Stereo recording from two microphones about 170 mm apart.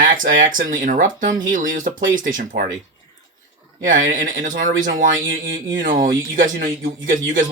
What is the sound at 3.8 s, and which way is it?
Speech, 50° right (ahead or behind).